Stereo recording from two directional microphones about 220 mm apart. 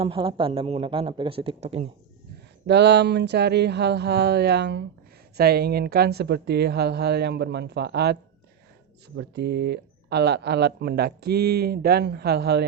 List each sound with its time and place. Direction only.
0.0 s speech: 25° right (ahead or behind)
2.6 s speech: 50° right (ahead or behind)